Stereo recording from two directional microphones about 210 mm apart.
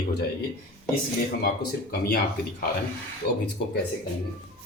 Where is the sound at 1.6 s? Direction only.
50° left (ahead or behind).